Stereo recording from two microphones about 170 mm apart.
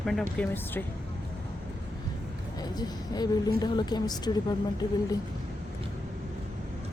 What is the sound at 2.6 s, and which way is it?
A woman's voice, 25° left (ahead or behind).